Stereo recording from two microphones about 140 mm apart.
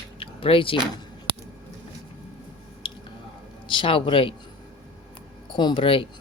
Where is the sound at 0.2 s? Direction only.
40° left (ahead or behind).